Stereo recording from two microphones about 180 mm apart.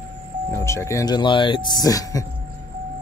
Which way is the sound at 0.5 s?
15° left (ahead or behind).